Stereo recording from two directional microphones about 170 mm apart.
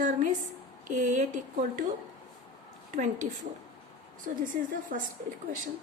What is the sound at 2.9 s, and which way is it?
Speech, 50° right (ahead or behind).